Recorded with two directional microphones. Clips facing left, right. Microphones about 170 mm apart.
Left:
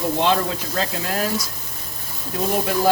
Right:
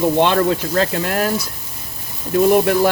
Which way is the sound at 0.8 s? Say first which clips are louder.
Right 6 dB; 60° right (ahead or behind).